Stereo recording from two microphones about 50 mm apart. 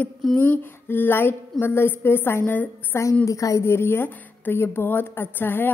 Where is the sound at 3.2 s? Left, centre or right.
Left.